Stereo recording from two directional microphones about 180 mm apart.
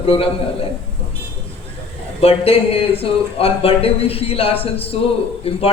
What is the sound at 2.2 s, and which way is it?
Speech, 30° left (ahead or behind).